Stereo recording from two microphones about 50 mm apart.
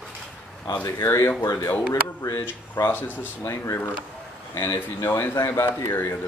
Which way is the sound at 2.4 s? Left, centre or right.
Left.